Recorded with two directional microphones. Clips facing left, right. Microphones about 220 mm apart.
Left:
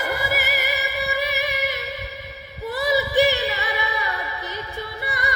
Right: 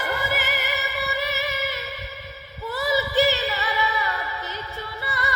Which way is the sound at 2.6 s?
15° left (ahead or behind).